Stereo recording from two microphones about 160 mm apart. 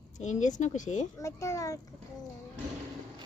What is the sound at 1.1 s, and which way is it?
Speech, 20° left (ahead or behind).